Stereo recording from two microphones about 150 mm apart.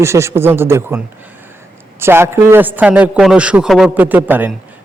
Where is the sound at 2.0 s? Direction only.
15° right (ahead or behind).